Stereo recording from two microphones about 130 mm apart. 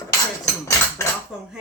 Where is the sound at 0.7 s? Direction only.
25° left (ahead or behind).